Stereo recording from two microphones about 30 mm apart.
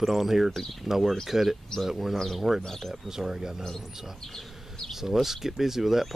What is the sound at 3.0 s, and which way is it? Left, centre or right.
Speech, centre.